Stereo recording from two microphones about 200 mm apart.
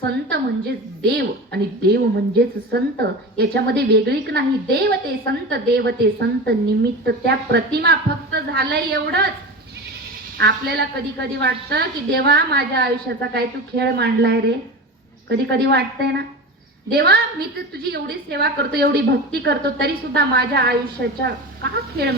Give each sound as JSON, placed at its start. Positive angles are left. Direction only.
{"t": 1.0, "sound": "a woman's voice", "side_deg": -55}
{"t": 10.3, "sound": "a woman's voice", "side_deg": -60}